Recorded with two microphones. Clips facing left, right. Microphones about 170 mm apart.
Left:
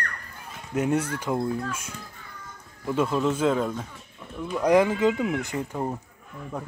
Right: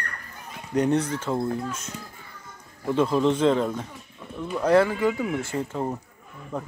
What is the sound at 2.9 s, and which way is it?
Speech, 5° left (ahead or behind).